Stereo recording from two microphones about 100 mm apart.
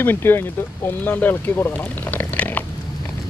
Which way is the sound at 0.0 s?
20° left (ahead or behind).